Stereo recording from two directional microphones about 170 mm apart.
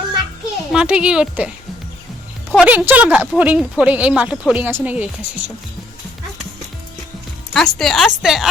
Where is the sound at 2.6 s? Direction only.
10° right (ahead or behind).